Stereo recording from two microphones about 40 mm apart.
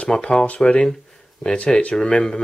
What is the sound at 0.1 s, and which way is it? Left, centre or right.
Speech, left.